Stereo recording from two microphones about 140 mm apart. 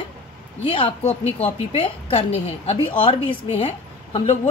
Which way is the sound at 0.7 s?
35° left (ahead or behind).